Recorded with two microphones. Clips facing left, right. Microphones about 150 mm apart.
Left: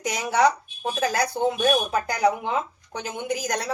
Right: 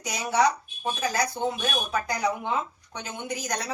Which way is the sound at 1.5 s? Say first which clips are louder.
Left 7 dB; 65° left (ahead or behind).